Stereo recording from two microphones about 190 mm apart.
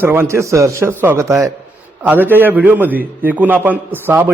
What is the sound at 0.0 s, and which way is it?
A man's voice, 10° right (ahead or behind).